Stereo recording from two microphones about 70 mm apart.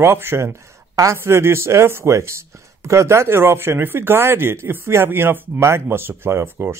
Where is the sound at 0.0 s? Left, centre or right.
Right.